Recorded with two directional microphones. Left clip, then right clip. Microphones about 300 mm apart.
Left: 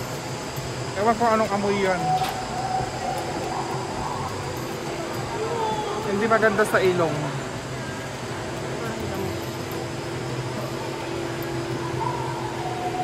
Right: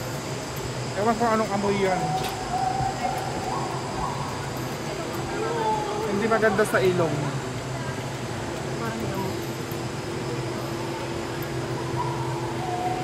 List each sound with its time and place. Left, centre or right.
1.0 s speech: centre
6.3 s speech: centre